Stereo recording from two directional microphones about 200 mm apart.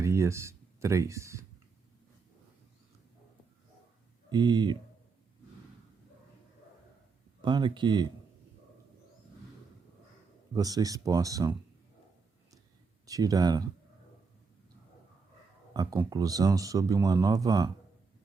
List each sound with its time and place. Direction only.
0.0 s speech: 15° right (ahead or behind)
4.3 s speech: 20° right (ahead or behind)
7.4 s speech: 25° right (ahead or behind)
10.5 s speech: 20° right (ahead or behind)
13.1 s speech: 20° right (ahead or behind)
15.7 s speech: 20° right (ahead or behind)